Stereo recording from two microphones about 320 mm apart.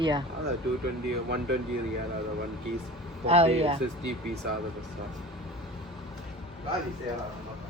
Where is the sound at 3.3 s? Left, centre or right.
Centre.